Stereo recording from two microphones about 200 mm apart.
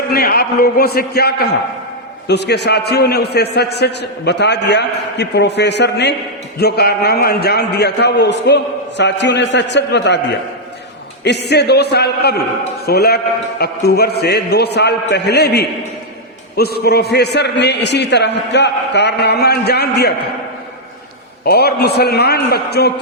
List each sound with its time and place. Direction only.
0.1 s a man's voice: 50° left (ahead or behind)
11.2 s a man's voice: 55° left (ahead or behind)
21.4 s a man's voice: 55° left (ahead or behind)